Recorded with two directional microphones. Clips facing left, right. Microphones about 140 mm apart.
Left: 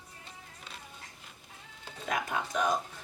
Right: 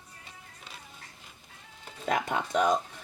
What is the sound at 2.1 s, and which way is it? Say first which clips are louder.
Speech: right 4 dB; 25° right (ahead or behind).